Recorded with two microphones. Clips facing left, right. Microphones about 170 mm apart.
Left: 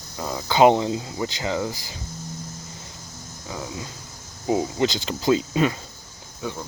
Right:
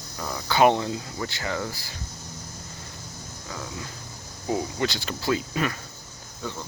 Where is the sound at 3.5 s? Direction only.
20° left (ahead or behind).